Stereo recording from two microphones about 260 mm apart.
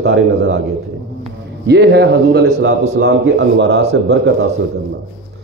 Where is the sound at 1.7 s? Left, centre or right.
Right.